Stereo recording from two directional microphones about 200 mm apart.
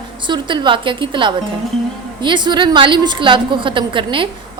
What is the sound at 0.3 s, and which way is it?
A woman's voice, 25° right (ahead or behind).